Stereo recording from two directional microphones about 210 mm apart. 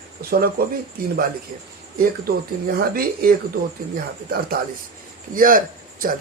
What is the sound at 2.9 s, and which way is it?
Speech, 45° right (ahead or behind).